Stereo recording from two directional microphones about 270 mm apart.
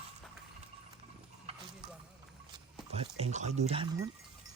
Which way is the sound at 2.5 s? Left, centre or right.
Right.